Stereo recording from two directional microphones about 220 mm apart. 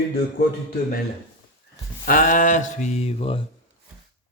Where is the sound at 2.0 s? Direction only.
40° left (ahead or behind).